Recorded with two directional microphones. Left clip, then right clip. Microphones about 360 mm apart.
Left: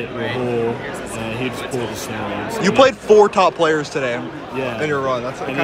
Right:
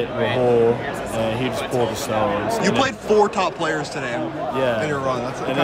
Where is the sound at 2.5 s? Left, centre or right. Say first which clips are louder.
Left 6 dB; centre.